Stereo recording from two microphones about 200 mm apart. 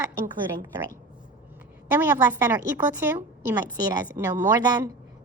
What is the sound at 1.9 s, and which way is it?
A woman's voice, 10° right (ahead or behind).